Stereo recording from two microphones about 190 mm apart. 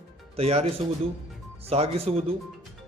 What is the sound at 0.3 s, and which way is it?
Speech, 35° right (ahead or behind).